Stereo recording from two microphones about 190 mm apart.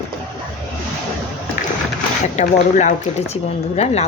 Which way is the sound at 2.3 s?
40° left (ahead or behind).